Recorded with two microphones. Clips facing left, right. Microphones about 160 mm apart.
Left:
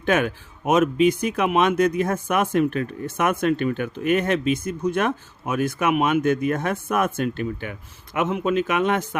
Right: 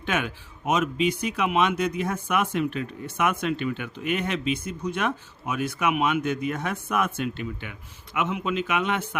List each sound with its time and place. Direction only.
0.0 s speech: 45° left (ahead or behind)